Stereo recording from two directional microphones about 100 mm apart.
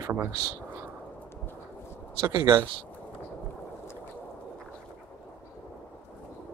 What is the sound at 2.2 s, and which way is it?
Speech, 50° right (ahead or behind).